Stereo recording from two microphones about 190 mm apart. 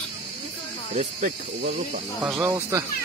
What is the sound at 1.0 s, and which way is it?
Cricket, 40° right (ahead or behind).